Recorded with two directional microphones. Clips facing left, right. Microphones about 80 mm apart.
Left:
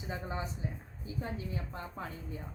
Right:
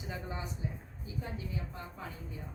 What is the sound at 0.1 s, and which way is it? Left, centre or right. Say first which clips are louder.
Speech: left 3 dB; left.